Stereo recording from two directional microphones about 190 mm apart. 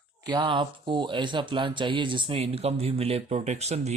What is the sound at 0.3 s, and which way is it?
Speech, 25° right (ahead or behind).